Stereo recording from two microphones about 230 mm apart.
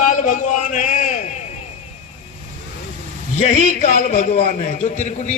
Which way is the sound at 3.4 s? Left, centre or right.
Left.